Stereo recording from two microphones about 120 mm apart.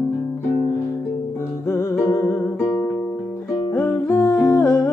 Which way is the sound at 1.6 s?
20° left (ahead or behind).